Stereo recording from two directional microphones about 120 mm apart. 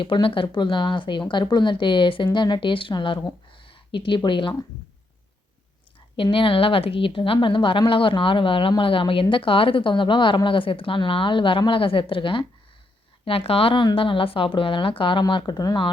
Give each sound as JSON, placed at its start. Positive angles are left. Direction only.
{"t": 0.0, "sound": "speech", "side_deg": 45}
{"t": 6.3, "sound": "speech", "side_deg": 50}